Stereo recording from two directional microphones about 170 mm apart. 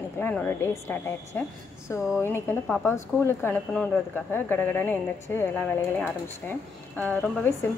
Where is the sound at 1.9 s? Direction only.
5° right (ahead or behind).